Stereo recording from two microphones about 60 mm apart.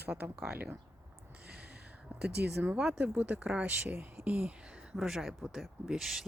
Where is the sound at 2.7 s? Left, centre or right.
Centre.